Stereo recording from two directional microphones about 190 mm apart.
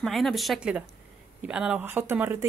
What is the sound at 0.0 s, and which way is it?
Speech, centre (ahead or behind).